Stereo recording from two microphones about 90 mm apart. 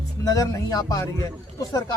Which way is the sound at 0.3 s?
40° left (ahead or behind).